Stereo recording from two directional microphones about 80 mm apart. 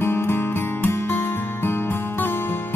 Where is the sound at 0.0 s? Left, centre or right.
Left.